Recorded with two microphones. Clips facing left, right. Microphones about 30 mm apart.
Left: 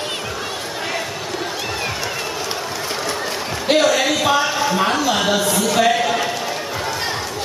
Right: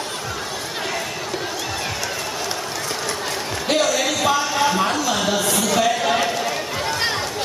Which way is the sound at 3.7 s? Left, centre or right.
Left.